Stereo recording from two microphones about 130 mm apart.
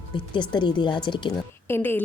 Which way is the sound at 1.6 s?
20° left (ahead or behind).